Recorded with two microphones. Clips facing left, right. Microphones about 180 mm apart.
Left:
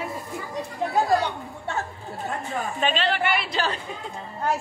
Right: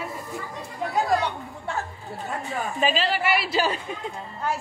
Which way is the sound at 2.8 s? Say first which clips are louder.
Right 1 dB; 5° right (ahead or behind).